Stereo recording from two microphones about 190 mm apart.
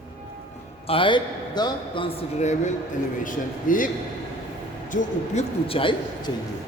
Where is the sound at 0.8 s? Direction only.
25° left (ahead or behind); by 5.4 s 40° left (ahead or behind).